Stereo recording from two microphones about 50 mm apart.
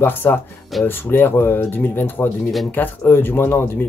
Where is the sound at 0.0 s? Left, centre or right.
Left.